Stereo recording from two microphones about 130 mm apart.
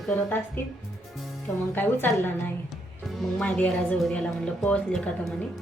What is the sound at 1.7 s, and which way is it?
Speech, 15° left (ahead or behind).